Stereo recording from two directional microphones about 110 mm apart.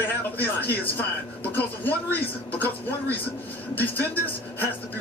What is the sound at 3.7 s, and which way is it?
Speech, 15° left (ahead or behind).